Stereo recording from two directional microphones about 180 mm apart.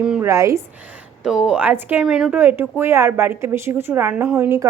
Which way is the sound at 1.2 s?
5° right (ahead or behind).